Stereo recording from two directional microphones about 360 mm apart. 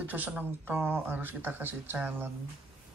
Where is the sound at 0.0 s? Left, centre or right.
Centre.